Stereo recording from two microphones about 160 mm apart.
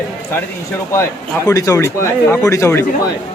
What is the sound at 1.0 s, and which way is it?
Speech, 20° left (ahead or behind).